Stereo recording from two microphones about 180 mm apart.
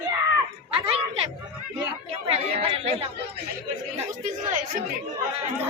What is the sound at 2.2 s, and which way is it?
Speech, 30° right (ahead or behind).